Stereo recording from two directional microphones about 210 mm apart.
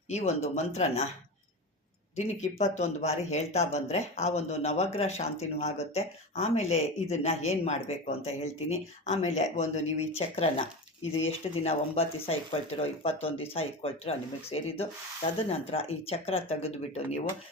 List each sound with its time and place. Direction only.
0.1 s speech: 35° left (ahead or behind)
2.1 s speech: 35° left (ahead or behind)